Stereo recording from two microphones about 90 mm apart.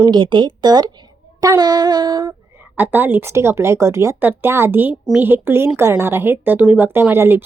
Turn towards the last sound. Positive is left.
turn(degrees=-25)  # may be behind; listen again after turning